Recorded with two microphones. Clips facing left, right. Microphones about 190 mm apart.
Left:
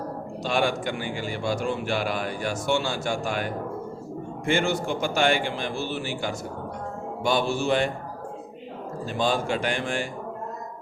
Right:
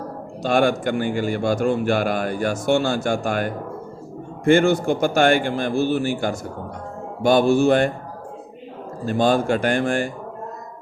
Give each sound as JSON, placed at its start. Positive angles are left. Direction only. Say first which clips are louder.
{"t": 0.4, "sound": "a man's voice", "louder": "right 6 dB", "side_deg": -50}
{"t": 9.0, "sound": "a man's voice", "louder": "right 7 dB", "side_deg": -50}